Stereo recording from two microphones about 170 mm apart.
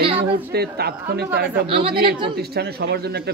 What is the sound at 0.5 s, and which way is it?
Speech, 70° right (ahead or behind).